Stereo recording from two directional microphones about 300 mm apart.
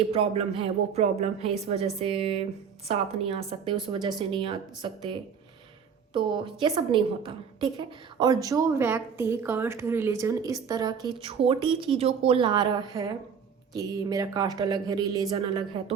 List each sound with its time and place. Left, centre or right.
0.1 s a woman's voice: centre